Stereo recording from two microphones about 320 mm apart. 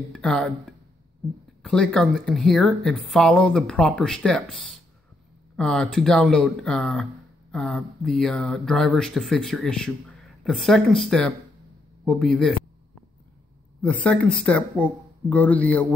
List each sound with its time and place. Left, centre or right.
0.1 s speech: centre
5.6 s speech: centre
13.8 s speech: centre